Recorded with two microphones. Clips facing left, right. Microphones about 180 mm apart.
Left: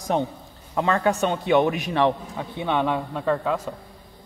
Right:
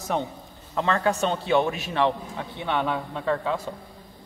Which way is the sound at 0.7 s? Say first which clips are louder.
Left 2 dB; 15° left (ahead or behind).